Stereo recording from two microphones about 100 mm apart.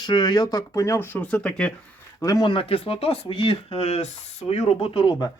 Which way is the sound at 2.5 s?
65° left (ahead or behind).